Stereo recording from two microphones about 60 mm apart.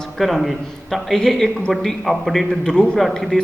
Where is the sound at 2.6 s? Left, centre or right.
Centre.